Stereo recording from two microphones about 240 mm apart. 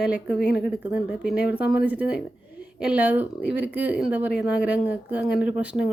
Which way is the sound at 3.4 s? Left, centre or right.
Left.